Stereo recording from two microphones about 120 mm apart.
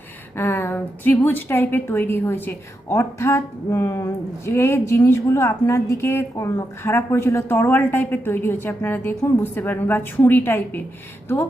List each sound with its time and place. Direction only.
0.3 s a woman's voice: 20° left (ahead or behind)